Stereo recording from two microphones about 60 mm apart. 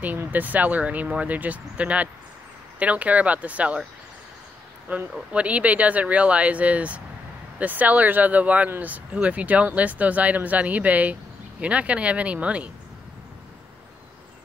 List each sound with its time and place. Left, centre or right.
0.3 s speech: right
4.9 s speech: right
5.3 s speech: right